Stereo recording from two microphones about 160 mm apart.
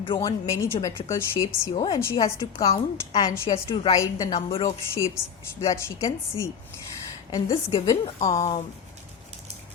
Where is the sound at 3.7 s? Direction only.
35° left (ahead or behind).